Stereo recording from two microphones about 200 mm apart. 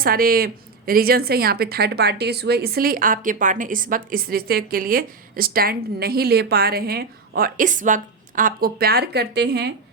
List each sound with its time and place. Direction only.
0.0 s speech: 45° right (ahead or behind)